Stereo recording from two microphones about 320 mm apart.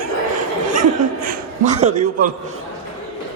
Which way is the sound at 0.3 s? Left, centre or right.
Right.